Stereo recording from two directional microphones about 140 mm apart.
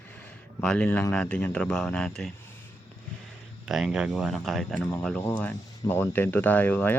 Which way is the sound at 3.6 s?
5° right (ahead or behind).